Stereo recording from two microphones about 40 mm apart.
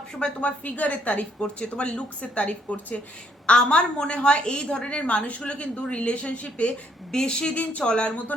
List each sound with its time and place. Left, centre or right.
0.4 s a woman's voice: left
1.4 s a woman's voice: left
7.1 s a woman's voice: centre
7.5 s a woman's voice: left